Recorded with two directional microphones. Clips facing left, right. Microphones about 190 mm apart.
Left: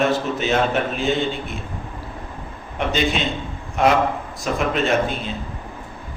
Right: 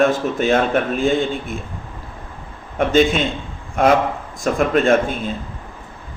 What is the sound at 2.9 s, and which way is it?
Speech, 50° right (ahead or behind).